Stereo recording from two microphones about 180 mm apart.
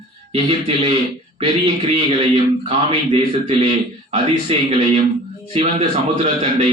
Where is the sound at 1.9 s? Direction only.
30° right (ahead or behind).